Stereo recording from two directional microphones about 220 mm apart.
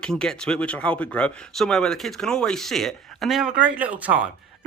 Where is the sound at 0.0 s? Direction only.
5° left (ahead or behind).